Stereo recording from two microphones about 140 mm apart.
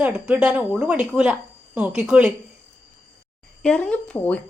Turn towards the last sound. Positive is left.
turn(degrees=10)  # may be behind; listen again after turning